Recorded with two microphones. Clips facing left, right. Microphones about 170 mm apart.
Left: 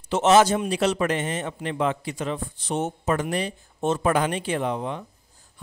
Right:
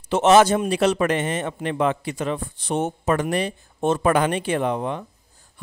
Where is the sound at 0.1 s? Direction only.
60° right (ahead or behind).